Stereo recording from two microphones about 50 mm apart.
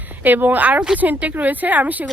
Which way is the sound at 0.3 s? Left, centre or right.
Right.